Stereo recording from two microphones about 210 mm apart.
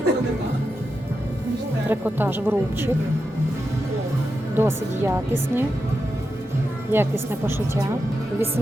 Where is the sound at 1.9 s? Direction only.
10° right (ahead or behind).